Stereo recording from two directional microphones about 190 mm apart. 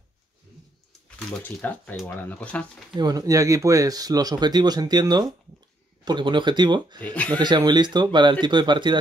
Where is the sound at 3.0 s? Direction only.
20° right (ahead or behind).